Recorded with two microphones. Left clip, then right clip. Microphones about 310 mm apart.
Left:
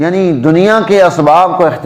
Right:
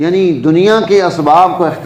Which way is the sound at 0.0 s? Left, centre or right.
Left.